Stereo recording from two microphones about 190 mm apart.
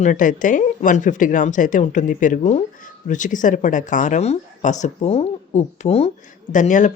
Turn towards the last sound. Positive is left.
turn(degrees=40)  # may be behind; listen again after turning